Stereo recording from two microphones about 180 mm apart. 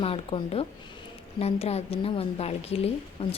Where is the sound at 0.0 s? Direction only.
30° left (ahead or behind).